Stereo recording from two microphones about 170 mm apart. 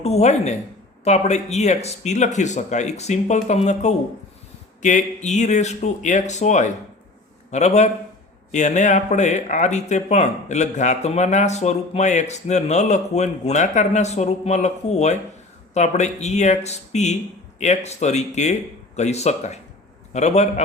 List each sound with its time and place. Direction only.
0.0 s speech: 40° left (ahead or behind)